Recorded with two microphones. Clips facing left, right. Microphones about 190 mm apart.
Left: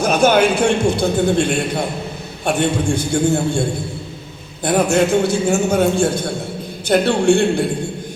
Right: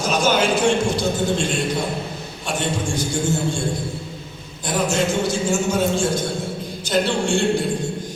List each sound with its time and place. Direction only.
0.0 s a man's voice: 60° left (ahead or behind)
4.6 s a man's voice: 60° left (ahead or behind)